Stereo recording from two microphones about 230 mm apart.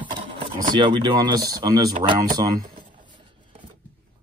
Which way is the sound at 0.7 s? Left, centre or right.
Centre.